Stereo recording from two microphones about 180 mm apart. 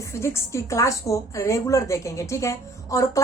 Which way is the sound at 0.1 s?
15° left (ahead or behind).